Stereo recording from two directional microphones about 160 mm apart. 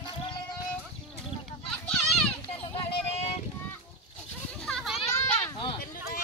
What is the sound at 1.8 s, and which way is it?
Children playing, centre (ahead or behind).